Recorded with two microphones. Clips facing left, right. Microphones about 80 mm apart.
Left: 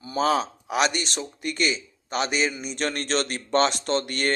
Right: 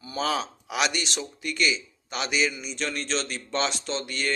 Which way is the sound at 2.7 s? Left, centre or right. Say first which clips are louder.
Left 4 dB; left.